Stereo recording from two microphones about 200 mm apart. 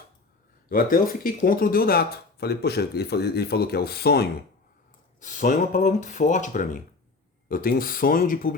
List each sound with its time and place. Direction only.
0.7 s speech: 45° left (ahead or behind)
5.2 s speech: 40° left (ahead or behind)